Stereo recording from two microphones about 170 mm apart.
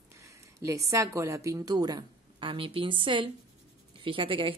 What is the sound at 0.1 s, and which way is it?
A woman's voice, 15° right (ahead or behind).